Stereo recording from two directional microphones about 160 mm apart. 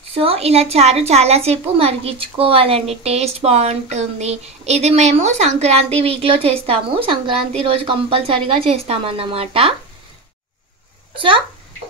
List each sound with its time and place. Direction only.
0.1 s a woman's voice: 35° right (ahead or behind)
11.1 s a woman's voice: 30° right (ahead or behind)